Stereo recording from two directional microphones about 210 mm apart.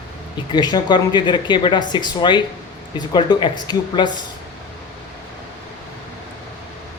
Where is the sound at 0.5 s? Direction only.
20° left (ahead or behind).